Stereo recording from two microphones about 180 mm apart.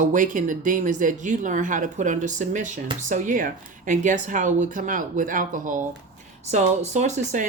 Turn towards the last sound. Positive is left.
turn(degrees=-40)  # may be behind; listen again after turning